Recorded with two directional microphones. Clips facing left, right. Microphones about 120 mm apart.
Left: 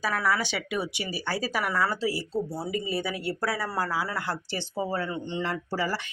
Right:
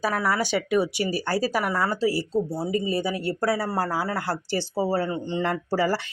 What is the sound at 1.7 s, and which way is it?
Speech, 30° right (ahead or behind).